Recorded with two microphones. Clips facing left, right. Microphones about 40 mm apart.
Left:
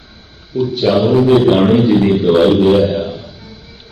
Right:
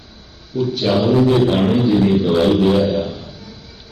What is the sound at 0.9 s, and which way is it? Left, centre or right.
Mantra, centre.